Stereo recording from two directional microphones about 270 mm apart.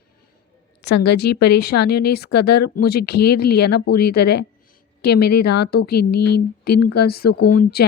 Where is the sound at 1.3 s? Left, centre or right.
Left.